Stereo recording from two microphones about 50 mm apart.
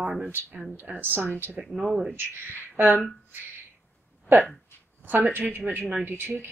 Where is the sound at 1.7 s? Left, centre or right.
Centre.